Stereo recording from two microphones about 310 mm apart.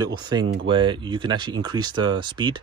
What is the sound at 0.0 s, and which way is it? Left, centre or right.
Speech, centre.